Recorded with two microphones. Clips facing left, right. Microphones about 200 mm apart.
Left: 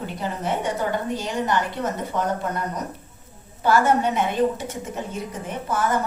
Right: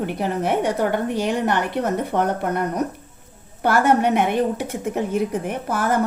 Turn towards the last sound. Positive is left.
turn(degrees=-60)  # may be behind; listen again after turning